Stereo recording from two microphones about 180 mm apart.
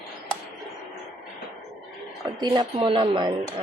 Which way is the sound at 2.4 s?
25° right (ahead or behind).